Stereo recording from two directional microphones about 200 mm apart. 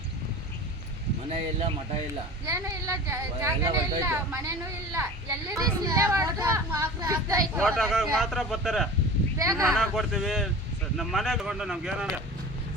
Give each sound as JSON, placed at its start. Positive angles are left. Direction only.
{"t": 1.3, "sound": "speech", "side_deg": -30}
{"t": 2.5, "sound": "speech", "side_deg": -15}
{"t": 7.6, "sound": "speech", "side_deg": 0}
{"t": 9.4, "sound": "speech", "side_deg": -15}
{"t": 9.6, "sound": "speech", "side_deg": 0}